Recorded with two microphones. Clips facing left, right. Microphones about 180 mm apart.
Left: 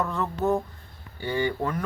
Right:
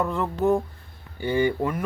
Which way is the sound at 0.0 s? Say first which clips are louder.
Right 3 dB; 15° right (ahead or behind).